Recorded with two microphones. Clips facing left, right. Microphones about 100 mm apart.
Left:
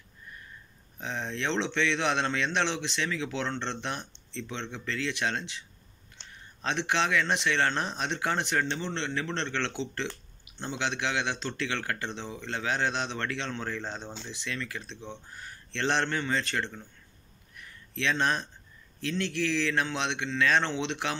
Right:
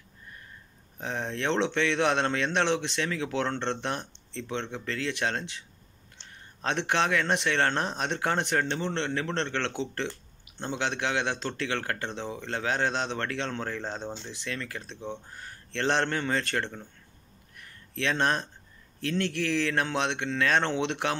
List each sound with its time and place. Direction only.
1.0 s speech: 45° right (ahead or behind)
6.6 s speech: 50° right (ahead or behind)
17.9 s speech: 45° right (ahead or behind)